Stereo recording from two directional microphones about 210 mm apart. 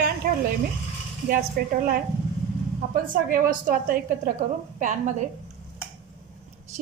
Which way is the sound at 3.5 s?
40° right (ahead or behind).